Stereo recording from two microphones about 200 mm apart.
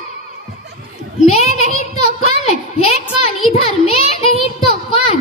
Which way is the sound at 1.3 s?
30° left (ahead or behind).